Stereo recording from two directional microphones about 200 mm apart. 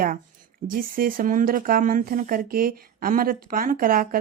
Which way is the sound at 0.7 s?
45° right (ahead or behind).